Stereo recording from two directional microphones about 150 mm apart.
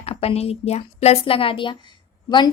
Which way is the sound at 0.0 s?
40° left (ahead or behind).